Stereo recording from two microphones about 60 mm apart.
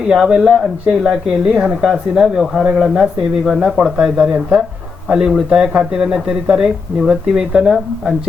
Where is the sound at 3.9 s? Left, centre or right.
Centre.